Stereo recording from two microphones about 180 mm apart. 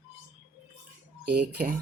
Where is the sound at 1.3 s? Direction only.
65° right (ahead or behind).